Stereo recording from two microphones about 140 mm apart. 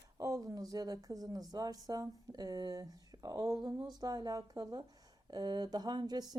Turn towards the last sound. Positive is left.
turn(degrees=-30)  # may be behind; listen again after turning